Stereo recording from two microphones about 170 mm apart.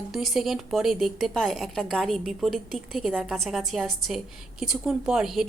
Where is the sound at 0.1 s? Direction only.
Centre (ahead or behind).